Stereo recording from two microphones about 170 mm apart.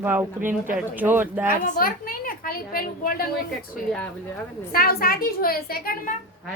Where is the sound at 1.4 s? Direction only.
55° left (ahead or behind).